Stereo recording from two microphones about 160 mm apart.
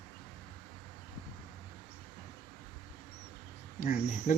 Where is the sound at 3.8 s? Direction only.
45° left (ahead or behind).